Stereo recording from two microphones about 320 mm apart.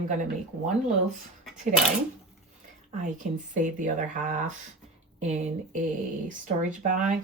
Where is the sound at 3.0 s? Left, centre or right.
Right.